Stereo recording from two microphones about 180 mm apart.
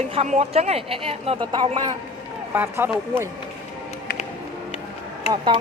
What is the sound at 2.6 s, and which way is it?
Speech, 10° right (ahead or behind).